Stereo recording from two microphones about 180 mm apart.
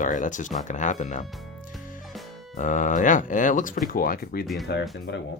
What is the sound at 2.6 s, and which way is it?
Speech, 45° left (ahead or behind).